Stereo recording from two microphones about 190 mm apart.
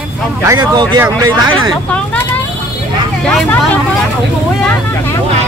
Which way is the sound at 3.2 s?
5° left (ahead or behind).